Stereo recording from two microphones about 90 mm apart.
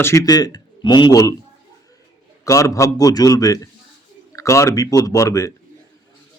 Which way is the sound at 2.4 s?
35° left (ahead or behind).